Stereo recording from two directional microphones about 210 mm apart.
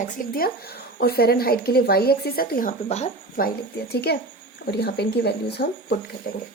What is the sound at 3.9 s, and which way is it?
Speech, 50° left (ahead or behind).